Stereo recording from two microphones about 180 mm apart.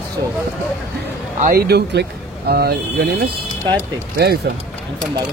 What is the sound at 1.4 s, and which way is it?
Speech, 60° right (ahead or behind).